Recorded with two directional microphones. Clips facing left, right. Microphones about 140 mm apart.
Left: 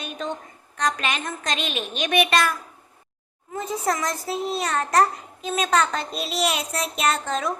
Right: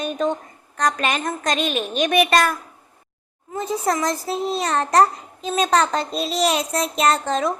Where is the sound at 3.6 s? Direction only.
35° right (ahead or behind).